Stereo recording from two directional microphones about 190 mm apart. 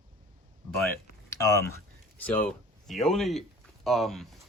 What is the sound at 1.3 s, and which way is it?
Speech, 15° left (ahead or behind).